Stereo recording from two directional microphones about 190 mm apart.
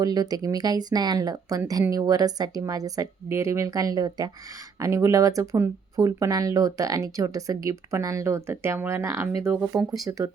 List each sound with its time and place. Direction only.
0.0 s speech: 20° right (ahead or behind)
9.7 s speech: 20° right (ahead or behind)